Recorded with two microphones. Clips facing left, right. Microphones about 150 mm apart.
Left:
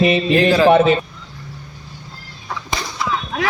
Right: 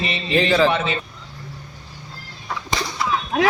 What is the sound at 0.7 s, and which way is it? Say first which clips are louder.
Speech: left 11 dB; 55° left (ahead or behind).